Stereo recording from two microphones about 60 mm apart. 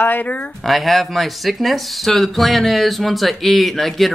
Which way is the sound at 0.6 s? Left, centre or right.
Centre.